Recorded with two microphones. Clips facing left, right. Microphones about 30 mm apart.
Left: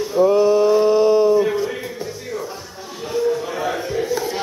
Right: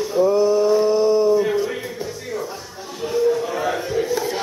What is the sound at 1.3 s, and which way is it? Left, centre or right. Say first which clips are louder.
Music: left 1 dB; centre.